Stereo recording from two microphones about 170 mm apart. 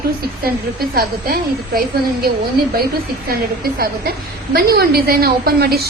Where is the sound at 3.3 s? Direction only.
65° right (ahead or behind).